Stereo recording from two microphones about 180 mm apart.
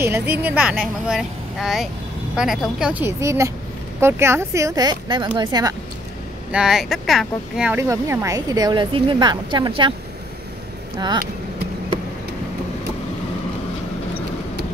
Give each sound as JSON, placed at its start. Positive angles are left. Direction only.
{"t": 0.0, "sound": "a woman's voice", "side_deg": -10}
{"t": 6.5, "sound": "speech", "side_deg": -5}
{"t": 7.7, "sound": "a woman's voice", "side_deg": -15}
{"t": 11.0, "sound": "a woman's voice", "side_deg": -25}